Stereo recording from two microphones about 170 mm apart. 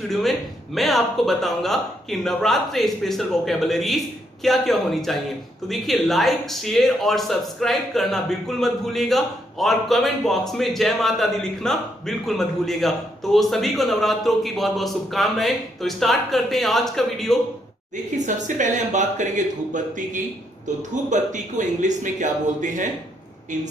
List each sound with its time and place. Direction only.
0.1 s speech: centre (ahead or behind)
18.1 s speech: 45° right (ahead or behind)